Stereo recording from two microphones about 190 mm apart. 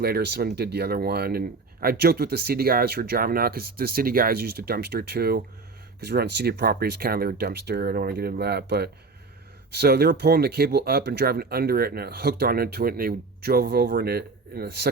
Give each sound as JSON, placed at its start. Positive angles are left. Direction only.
{"t": 0.0, "sound": "speech", "side_deg": -60}